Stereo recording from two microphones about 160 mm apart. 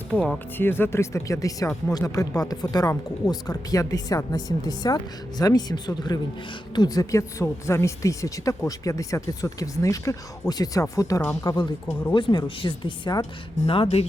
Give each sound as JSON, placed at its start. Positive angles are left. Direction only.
{"t": 0.1, "sound": "speech", "side_deg": 10}
{"t": 12.1, "sound": "speech", "side_deg": 30}